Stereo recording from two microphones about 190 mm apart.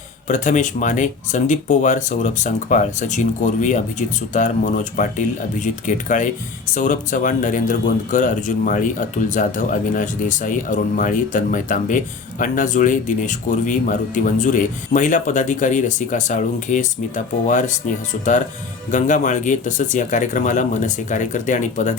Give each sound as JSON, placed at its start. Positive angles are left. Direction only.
{"t": 0.3, "sound": "speech", "side_deg": 40}
{"t": 18.9, "sound": "speech", "side_deg": 40}